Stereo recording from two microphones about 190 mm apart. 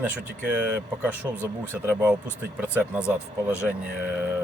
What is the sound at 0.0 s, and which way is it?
Speech, 5° right (ahead or behind).